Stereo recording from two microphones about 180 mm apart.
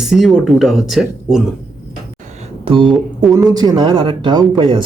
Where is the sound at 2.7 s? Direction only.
30° right (ahead or behind).